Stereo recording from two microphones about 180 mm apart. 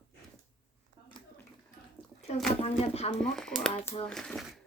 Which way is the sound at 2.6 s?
35° left (ahead or behind).